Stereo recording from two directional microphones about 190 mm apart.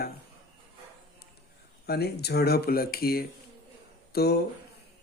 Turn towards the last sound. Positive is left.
turn(degrees=55)  # may be behind; listen again after turning